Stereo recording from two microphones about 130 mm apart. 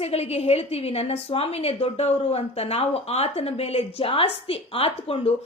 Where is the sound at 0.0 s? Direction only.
50° left (ahead or behind).